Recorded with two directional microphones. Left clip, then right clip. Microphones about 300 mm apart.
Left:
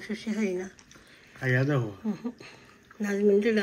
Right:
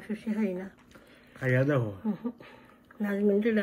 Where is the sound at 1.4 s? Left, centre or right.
Right.